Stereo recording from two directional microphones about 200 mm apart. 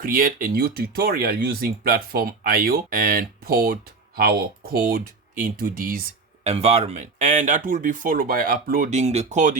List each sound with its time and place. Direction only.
0.0 s speech: 45° right (ahead or behind)
6.5 s speech: 30° right (ahead or behind)